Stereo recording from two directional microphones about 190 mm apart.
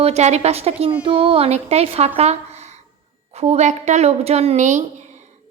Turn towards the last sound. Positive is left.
turn(degrees=-40)  # may be behind; listen again after turning